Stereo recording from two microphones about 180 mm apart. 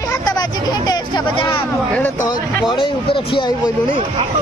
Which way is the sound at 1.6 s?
10° left (ahead or behind).